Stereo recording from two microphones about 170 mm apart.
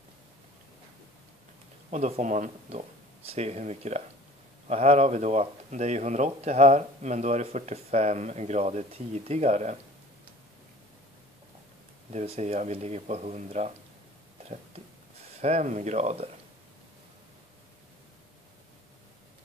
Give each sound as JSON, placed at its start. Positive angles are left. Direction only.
{"t": 1.9, "sound": "speech", "side_deg": -40}
{"t": 12.1, "sound": "speech", "side_deg": -40}
{"t": 15.4, "sound": "speech", "side_deg": -40}